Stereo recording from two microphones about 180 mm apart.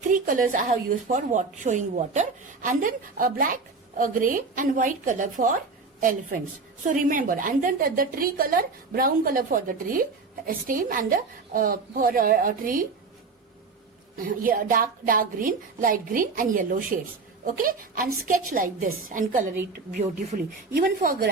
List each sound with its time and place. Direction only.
0.1 s a woman's voice: 50° right (ahead or behind)
14.3 s a woman's voice: 50° right (ahead or behind)